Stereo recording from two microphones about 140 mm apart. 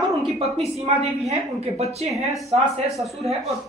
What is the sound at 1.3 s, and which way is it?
Speech, 50° right (ahead or behind).